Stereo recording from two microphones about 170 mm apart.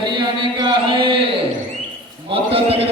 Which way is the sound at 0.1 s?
30° right (ahead or behind).